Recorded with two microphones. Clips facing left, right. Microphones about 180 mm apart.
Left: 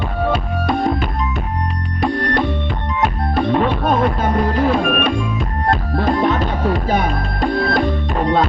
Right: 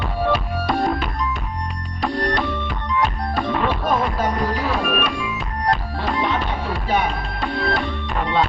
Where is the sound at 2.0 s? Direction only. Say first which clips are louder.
Left 4 dB; 60° left (ahead or behind).